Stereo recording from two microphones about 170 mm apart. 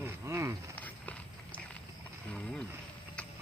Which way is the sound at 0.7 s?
10° left (ahead or behind).